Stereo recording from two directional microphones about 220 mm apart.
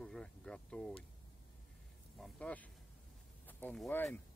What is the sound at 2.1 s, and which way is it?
Speech, 5° left (ahead or behind).